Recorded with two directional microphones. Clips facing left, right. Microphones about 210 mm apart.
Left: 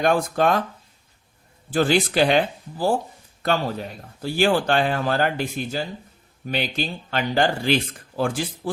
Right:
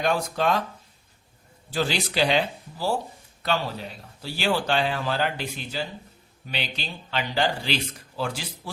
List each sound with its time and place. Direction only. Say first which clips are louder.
0.0 s speech: left 5 dB; 50° left (ahead or behind)
1.7 s speech: left 7 dB; 50° left (ahead or behind)
4.2 s speech: left 6 dB; 50° left (ahead or behind)